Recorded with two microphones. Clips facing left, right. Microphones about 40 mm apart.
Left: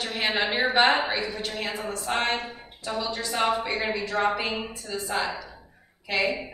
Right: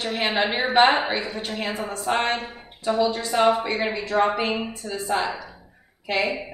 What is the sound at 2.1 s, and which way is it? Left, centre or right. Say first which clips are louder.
Speech: right 3 dB; centre.